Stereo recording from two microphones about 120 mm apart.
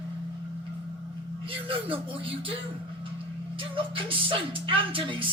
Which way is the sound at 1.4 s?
50° right (ahead or behind).